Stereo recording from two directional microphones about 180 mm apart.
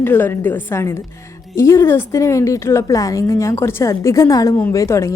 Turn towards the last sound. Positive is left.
turn(degrees=15)  # may be behind; listen again after turning